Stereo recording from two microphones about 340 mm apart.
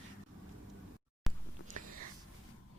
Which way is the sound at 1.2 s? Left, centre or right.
Centre.